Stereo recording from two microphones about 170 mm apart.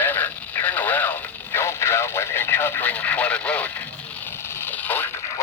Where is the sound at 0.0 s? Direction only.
10° left (ahead or behind).